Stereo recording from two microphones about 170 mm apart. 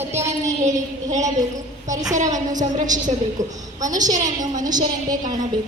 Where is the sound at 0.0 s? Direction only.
15° right (ahead or behind).